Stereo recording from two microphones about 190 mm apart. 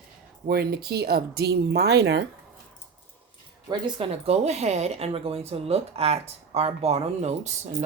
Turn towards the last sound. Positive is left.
turn(degrees=-35)  # may be behind; listen again after turning